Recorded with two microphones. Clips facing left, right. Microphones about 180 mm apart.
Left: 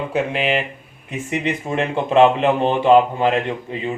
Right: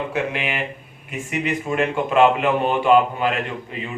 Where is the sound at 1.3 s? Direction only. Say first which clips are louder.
Left 1 dB; 25° left (ahead or behind).